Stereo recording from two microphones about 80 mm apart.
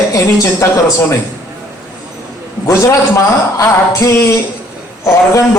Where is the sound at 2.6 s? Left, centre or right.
Left.